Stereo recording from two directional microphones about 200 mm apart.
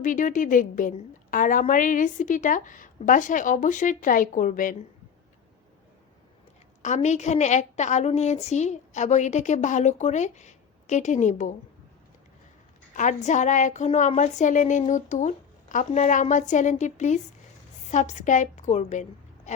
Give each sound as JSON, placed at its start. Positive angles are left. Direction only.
{"t": 0.0, "sound": "a woman's voice", "side_deg": 40}
{"t": 6.8, "sound": "a woman's voice", "side_deg": 35}
{"t": 12.9, "sound": "a woman's voice", "side_deg": 40}
{"t": 19.5, "sound": "dog", "side_deg": 35}